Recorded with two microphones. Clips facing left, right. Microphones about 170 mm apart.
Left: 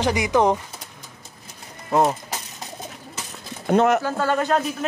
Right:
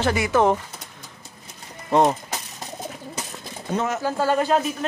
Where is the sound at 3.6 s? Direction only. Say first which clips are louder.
Left 8 dB; 65° left (ahead or behind).